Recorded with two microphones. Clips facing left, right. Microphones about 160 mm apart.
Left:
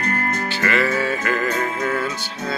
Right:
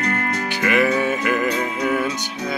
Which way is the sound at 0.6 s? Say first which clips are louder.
Right 3 dB; 15° right (ahead or behind).